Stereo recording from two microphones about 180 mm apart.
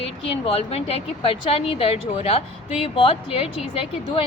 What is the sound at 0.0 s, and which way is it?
A woman's voice, 35° left (ahead or behind).